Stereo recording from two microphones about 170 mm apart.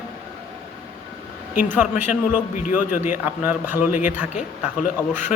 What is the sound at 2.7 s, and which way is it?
Speech, 55° left (ahead or behind).